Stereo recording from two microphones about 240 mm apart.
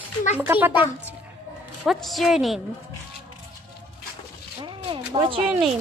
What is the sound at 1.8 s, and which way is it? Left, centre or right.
Speech, centre.